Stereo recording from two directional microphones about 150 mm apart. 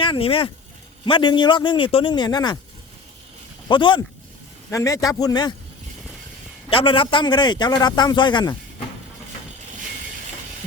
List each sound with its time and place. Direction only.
0.0 s a man's voice: 35° left (ahead or behind)
3.7 s a man's voice: 35° left (ahead or behind)
4.7 s speech: 20° left (ahead or behind)
6.7 s a man's voice: 35° left (ahead or behind)